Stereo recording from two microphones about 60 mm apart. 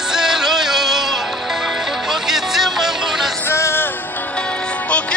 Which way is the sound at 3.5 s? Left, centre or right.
Left.